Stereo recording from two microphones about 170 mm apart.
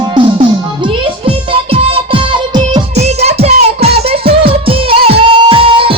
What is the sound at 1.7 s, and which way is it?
Music, 35° right (ahead or behind).